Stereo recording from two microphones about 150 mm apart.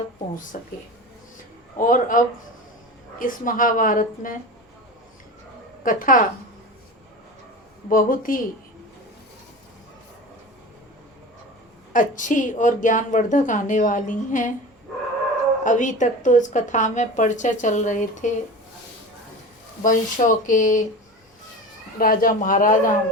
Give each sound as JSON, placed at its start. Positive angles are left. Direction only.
{"t": 0.5, "sound": "speech", "side_deg": 65}
{"t": 1.8, "sound": "speech", "side_deg": 65}
{"t": 5.8, "sound": "speech", "side_deg": 65}
{"t": 7.9, "sound": "a woman's voice", "side_deg": 65}
{"t": 11.9, "sound": "speech", "side_deg": 60}
{"t": 15.6, "sound": "speech", "side_deg": 55}
{"t": 19.8, "sound": "speech", "side_deg": 60}
{"t": 21.9, "sound": "speech", "side_deg": 75}